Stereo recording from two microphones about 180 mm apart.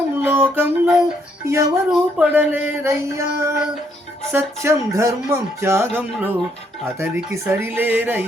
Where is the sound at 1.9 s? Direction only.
5° right (ahead or behind).